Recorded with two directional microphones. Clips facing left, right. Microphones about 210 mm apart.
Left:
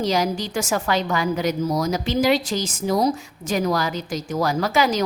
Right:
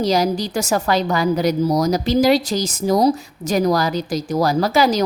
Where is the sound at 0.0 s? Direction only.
35° right (ahead or behind).